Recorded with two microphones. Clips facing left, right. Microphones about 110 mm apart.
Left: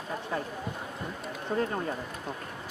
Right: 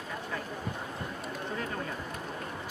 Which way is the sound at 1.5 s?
30° left (ahead or behind).